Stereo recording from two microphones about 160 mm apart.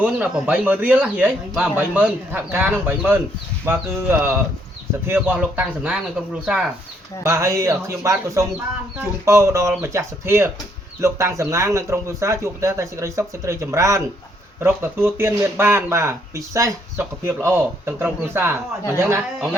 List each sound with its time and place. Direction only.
0.0 s speech: 10° right (ahead or behind)
7.2 s speech: 15° right (ahead or behind)